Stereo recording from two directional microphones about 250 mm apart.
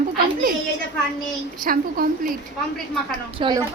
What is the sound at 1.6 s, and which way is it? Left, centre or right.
Speech, right.